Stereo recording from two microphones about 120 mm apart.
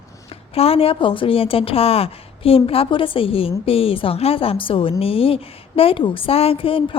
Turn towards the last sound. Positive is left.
turn(degrees=50)  # may be behind; listen again after turning